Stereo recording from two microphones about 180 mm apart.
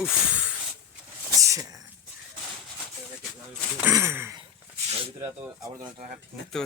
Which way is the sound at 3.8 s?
15° right (ahead or behind).